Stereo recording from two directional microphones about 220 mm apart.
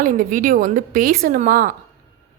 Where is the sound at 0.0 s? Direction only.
35° right (ahead or behind).